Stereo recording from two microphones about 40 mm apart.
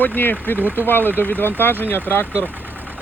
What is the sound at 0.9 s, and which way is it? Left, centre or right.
Speech, left.